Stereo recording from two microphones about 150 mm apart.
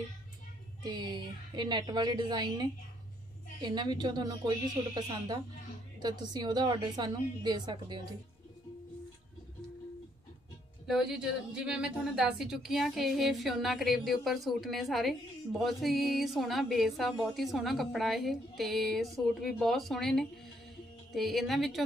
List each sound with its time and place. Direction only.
0.8 s a woman's voice: 30° right (ahead or behind)
10.9 s a woman's voice: 5° right (ahead or behind)